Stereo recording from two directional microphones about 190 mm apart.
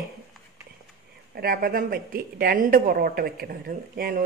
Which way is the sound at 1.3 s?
50° right (ahead or behind).